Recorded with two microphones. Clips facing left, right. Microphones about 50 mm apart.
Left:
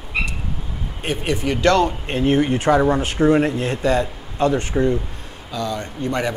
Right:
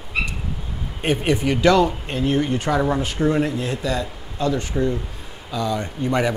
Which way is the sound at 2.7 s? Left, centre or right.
Left.